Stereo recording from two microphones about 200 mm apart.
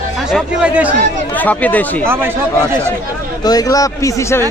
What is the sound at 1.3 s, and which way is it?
Speech, 10° left (ahead or behind).